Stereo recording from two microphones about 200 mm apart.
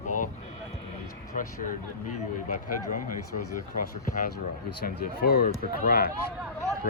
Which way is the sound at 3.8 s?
45° left (ahead or behind).